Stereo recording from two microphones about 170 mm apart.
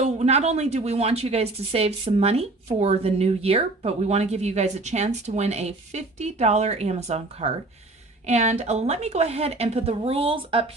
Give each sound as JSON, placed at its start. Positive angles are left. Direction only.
{"t": 0.0, "sound": "a woman's voice", "side_deg": -40}